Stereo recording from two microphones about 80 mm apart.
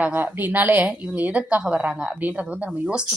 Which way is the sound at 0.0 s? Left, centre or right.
Right.